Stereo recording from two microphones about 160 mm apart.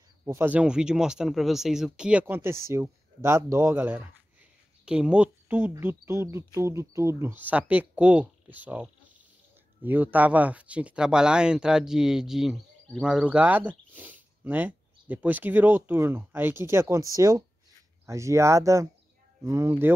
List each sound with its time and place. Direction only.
0.2 s speech: 15° right (ahead or behind)